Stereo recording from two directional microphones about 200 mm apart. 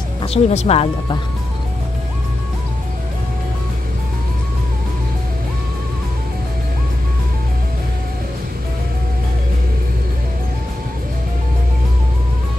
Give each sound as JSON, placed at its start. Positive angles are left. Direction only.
{"t": 0.3, "sound": "speech", "side_deg": 30}